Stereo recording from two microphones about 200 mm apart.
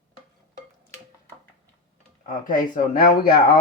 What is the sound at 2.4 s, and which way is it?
Speech, 45° left (ahead or behind).